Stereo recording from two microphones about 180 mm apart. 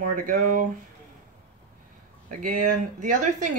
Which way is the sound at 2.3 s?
45° right (ahead or behind).